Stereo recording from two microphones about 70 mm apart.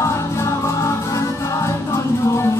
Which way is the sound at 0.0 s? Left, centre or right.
Left.